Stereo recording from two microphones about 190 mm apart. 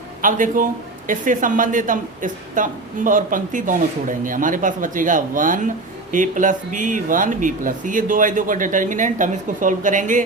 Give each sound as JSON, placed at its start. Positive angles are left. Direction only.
{"t": 0.2, "sound": "speech", "side_deg": -45}